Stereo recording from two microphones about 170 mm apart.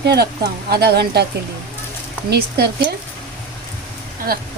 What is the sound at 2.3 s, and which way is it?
Speech, 70° right (ahead or behind).